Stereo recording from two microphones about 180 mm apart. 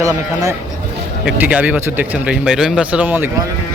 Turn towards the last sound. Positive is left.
turn(degrees=-10)  # may be behind; listen again after turning